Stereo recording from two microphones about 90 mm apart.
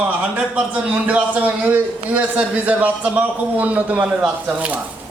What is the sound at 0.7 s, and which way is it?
A man's voice, 15° right (ahead or behind).